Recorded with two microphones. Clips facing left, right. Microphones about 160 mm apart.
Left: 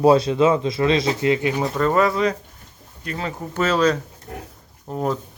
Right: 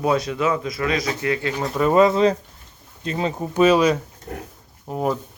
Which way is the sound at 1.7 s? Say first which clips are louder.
Right 5 dB; 15° right (ahead or behind).